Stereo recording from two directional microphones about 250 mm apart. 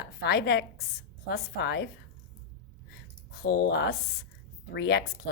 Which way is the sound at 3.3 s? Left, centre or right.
Left.